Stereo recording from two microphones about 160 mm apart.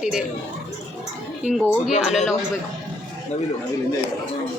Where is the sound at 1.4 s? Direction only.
5° right (ahead or behind).